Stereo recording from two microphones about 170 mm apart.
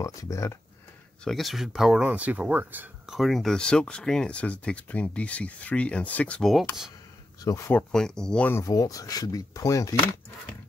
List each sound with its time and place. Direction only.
0.0 s speech: 20° left (ahead or behind)
1.2 s speech: centre (ahead or behind)
7.4 s speech: 20° left (ahead or behind)
7.7 s speech: 5° left (ahead or behind); by 9.9 s 20° left (ahead or behind)